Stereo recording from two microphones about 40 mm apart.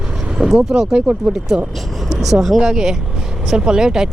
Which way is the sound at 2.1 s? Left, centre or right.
Centre.